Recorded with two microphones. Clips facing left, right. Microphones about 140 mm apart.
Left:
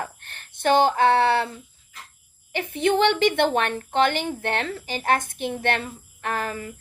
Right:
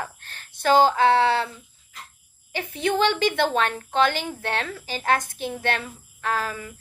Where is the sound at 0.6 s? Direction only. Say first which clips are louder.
Right 1 dB; 55° left (ahead or behind).